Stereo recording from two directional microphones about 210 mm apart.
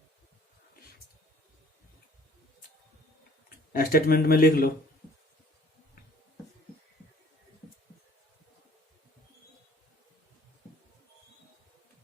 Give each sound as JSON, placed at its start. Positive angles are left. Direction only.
{"t": 3.7, "sound": "a man's voice", "side_deg": 45}